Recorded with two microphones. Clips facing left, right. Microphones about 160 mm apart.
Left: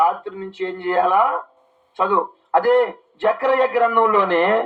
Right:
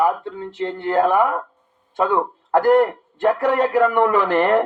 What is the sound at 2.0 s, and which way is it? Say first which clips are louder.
A man's voice: even; 45° right (ahead or behind).